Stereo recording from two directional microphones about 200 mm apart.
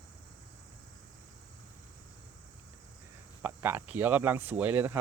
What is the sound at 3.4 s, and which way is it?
Speech, 10° right (ahead or behind).